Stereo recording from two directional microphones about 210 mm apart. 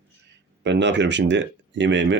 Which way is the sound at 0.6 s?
55° right (ahead or behind).